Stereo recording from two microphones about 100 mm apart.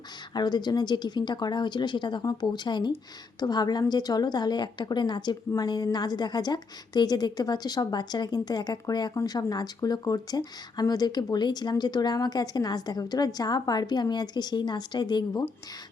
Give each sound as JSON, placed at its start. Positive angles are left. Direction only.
{"t": 0.3, "sound": "speech", "side_deg": 45}